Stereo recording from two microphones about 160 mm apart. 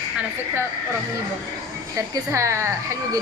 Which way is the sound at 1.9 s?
20° right (ahead or behind).